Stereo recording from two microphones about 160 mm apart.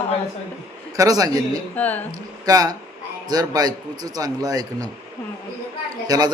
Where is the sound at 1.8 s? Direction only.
10° left (ahead or behind).